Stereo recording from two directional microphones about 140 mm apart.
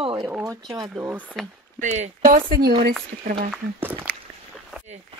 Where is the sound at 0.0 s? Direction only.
35° right (ahead or behind).